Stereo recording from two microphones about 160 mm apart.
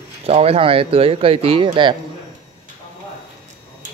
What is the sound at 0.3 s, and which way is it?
Speech, 40° right (ahead or behind).